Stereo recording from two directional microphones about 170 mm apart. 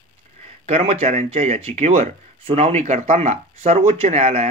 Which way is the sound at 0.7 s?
35° right (ahead or behind).